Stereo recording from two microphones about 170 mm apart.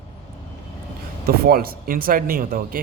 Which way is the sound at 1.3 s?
60° right (ahead or behind).